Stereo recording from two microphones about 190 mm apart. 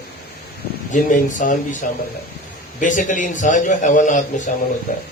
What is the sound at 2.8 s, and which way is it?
A man's voice, 40° left (ahead or behind).